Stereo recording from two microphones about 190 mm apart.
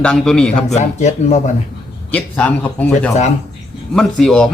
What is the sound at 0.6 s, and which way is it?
Speech, 35° left (ahead or behind).